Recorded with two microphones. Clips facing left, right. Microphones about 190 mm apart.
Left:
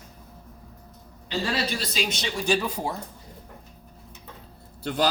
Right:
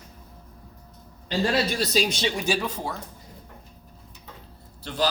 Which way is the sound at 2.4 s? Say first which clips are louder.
Left 5 dB; 5° right (ahead or behind).